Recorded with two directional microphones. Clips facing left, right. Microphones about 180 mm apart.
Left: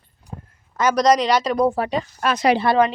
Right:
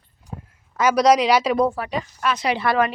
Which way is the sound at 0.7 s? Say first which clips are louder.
Right 1 dB; 5° right (ahead or behind).